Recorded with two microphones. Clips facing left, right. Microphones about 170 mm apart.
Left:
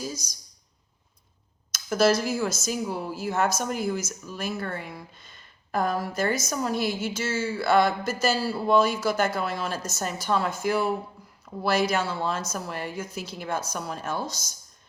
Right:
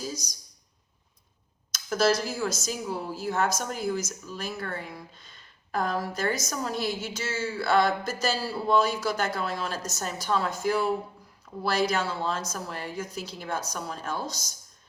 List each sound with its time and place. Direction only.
1.7 s a woman's voice: 5° left (ahead or behind)